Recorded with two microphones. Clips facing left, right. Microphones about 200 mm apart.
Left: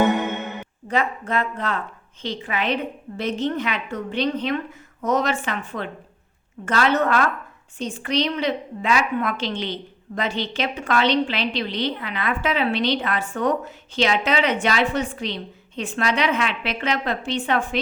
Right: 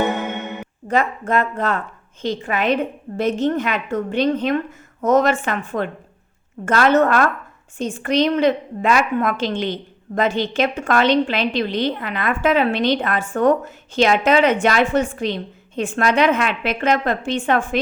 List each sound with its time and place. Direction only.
0.9 s a woman's voice: 45° right (ahead or behind)